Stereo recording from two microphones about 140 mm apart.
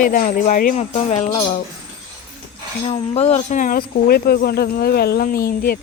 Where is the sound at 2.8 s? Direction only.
50° left (ahead or behind).